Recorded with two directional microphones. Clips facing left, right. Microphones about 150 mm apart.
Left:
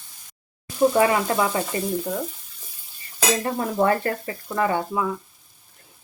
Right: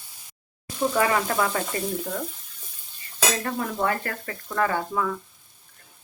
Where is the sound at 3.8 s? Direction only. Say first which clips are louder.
Left 8 dB; 30° left (ahead or behind).